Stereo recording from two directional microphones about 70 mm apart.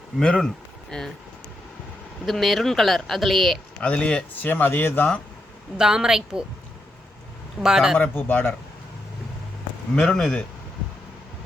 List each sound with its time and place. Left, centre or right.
0.2 s speech: centre
2.2 s speech: centre
3.8 s a man's voice: centre
4.5 s speech: left
5.7 s a woman's voice: centre
7.6 s a woman's voice: centre
7.9 s speech: left
9.9 s a man's voice: centre